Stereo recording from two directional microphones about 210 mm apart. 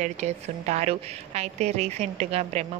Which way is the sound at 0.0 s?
30° right (ahead or behind).